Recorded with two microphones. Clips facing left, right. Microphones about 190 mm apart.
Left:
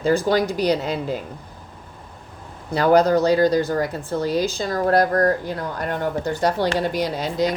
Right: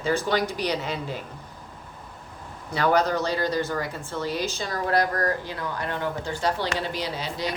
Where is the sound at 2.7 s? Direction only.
40° left (ahead or behind).